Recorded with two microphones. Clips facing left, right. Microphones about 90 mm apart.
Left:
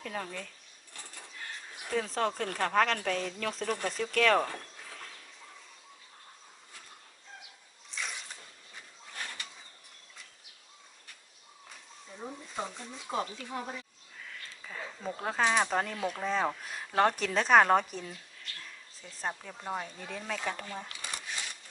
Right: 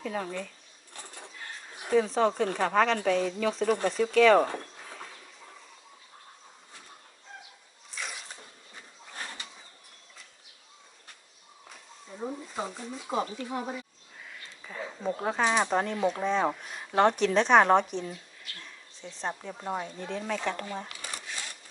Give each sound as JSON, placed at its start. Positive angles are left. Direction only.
{"t": 0.0, "sound": "a woman's voice", "side_deg": -5}
{"t": 1.9, "sound": "a woman's voice", "side_deg": -5}
{"t": 7.9, "sound": "zipper", "side_deg": -5}
{"t": 9.1, "sound": "pigeon", "side_deg": -25}
{"t": 11.7, "sound": "a sound", "side_deg": -10}
{"t": 14.7, "sound": "a woman's voice", "side_deg": -5}
{"t": 19.4, "sound": "a woman's voice", "side_deg": -5}
{"t": 20.6, "sound": "speech", "side_deg": -15}